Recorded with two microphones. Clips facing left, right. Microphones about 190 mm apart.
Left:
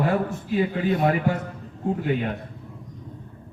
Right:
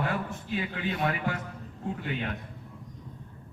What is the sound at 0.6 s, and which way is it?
Chant, 40° left (ahead or behind).